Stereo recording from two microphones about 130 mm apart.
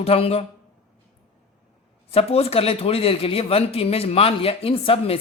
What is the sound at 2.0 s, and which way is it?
Speech, 50° left (ahead or behind).